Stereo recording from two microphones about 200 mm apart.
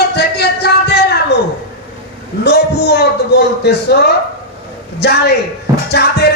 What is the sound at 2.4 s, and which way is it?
Speech, 55° left (ahead or behind).